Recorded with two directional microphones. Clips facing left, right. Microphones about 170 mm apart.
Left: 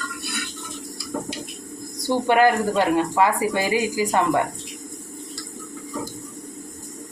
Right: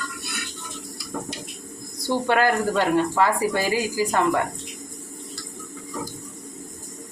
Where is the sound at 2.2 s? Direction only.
15° left (ahead or behind).